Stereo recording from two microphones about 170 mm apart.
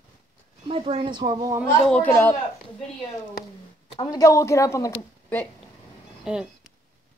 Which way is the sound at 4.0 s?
20° left (ahead or behind).